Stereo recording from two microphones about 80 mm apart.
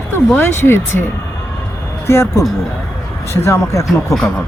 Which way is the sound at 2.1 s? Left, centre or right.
Left.